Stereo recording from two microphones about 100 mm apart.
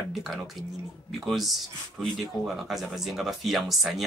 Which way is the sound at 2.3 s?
45° left (ahead or behind).